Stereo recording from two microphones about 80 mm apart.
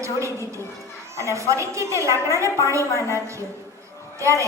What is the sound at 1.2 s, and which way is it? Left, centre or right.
A woman's voice, right.